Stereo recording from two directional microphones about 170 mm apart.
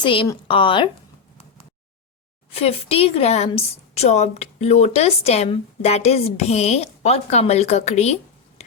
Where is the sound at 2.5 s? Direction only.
35° left (ahead or behind).